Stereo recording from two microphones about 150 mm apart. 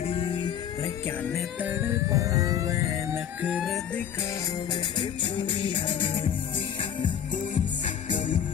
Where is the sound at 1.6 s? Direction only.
15° right (ahead or behind).